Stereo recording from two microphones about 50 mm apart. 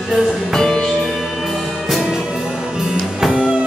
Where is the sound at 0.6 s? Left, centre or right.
Centre.